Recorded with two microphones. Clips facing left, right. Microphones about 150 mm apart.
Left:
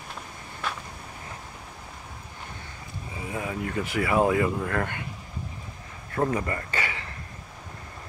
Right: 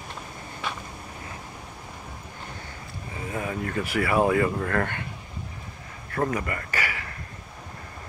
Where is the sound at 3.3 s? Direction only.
15° left (ahead or behind).